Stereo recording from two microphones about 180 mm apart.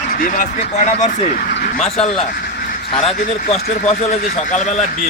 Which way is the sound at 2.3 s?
55° left (ahead or behind).